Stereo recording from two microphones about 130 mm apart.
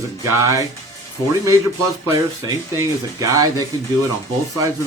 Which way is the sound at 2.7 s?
25° right (ahead or behind).